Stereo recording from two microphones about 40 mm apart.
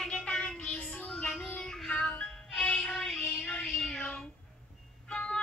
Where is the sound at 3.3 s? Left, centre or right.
Left.